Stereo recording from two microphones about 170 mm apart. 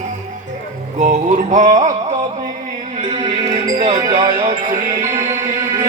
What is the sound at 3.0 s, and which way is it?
Music, 35° right (ahead or behind).